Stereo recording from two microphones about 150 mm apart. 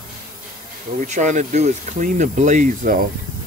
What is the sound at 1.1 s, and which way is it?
Speech, 55° right (ahead or behind).